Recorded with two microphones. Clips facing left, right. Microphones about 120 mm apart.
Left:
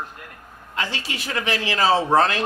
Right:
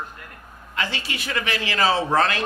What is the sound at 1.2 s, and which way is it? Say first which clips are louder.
A man's voice: left 2 dB; 30° left (ahead or behind).